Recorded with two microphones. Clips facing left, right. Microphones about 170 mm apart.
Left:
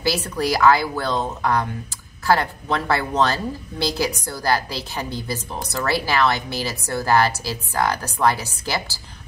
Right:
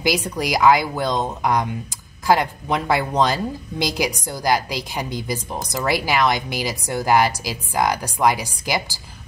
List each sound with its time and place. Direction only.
0.0 s speech: 15° right (ahead or behind)